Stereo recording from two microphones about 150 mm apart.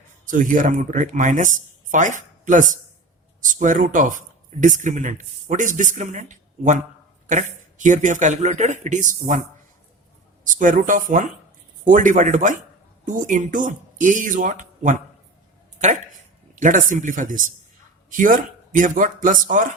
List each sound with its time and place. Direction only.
0.3 s speech: 60° right (ahead or behind)
10.4 s speech: 60° right (ahead or behind)
16.6 s speech: 55° right (ahead or behind)